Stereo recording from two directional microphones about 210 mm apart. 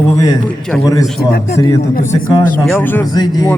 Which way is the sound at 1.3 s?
45° left (ahead or behind).